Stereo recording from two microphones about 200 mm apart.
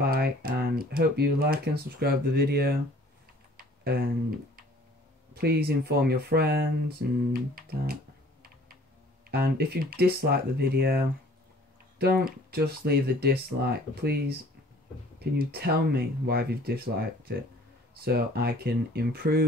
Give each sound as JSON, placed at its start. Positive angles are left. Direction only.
{"t": 0.0, "sound": "speech", "side_deg": -50}
{"t": 3.5, "sound": "typing", "side_deg": -50}
{"t": 5.3, "sound": "speech", "side_deg": -50}
{"t": 7.5, "sound": "computer keyboard", "side_deg": -50}
{"t": 9.3, "sound": "speech", "side_deg": -50}
{"t": 18.0, "sound": "speech", "side_deg": -50}